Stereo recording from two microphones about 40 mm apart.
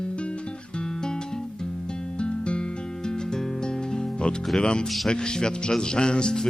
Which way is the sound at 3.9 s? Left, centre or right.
Left.